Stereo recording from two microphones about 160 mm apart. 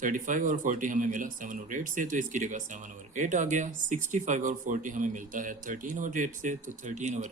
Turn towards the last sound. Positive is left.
turn(degrees=-50)  # may be behind; listen again after turning